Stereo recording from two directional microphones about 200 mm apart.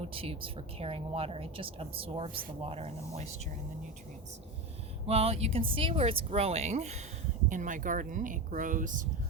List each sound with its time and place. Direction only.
0.0 s speech: 30° right (ahead or behind)
5.0 s speech: 30° right (ahead or behind)